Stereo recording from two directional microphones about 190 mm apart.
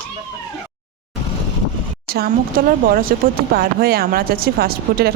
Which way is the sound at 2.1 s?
55° right (ahead or behind).